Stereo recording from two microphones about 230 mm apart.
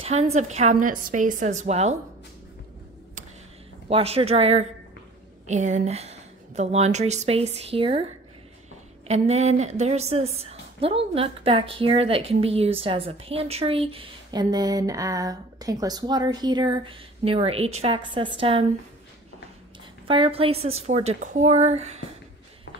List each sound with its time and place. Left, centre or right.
0.0 s a woman's voice: right
3.9 s a woman's voice: right
20.1 s a woman's voice: right